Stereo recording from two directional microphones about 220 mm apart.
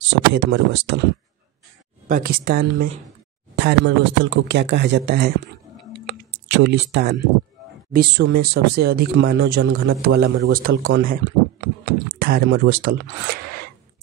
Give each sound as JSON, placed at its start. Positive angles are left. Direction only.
{"t": 0.0, "sound": "speech", "side_deg": -55}
{"t": 2.0, "sound": "a woman's voice", "side_deg": -40}
{"t": 5.9, "sound": "a sound", "side_deg": -50}
{"t": 7.9, "sound": "speech", "side_deg": -45}
{"t": 11.8, "sound": "a sound", "side_deg": -45}
{"t": 12.6, "sound": "speech", "side_deg": -40}